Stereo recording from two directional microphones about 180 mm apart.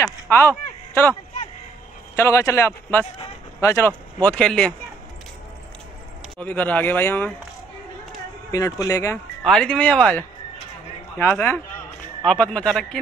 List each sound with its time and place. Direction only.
0.0 s a sound: 10° left (ahead or behind)
2.1 s speech: 15° left (ahead or behind)
6.3 s speech: 10° left (ahead or behind)
8.5 s speech: 20° left (ahead or behind)
9.4 s speech: 5° left (ahead or behind)